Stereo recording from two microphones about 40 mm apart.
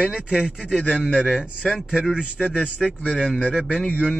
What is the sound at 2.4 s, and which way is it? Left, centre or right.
Speech, centre.